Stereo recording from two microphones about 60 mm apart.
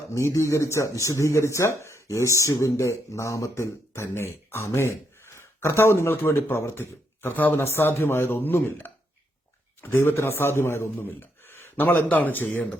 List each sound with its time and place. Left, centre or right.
0.1 s a man's voice: left